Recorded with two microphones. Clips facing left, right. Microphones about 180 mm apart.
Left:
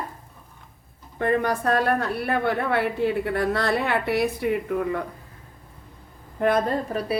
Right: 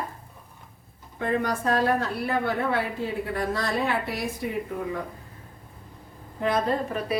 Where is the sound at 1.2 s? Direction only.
60° left (ahead or behind).